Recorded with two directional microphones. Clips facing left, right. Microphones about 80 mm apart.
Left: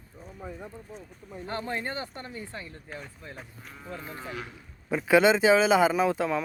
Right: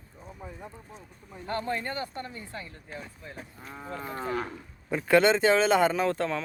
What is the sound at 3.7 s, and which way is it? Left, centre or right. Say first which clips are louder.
Cattle: right 4 dB; right.